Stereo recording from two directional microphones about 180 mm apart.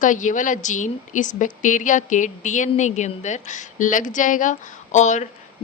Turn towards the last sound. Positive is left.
turn(degrees=40)  # may be behind; listen again after turning